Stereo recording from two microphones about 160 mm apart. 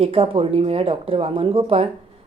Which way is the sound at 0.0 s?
35° right (ahead or behind).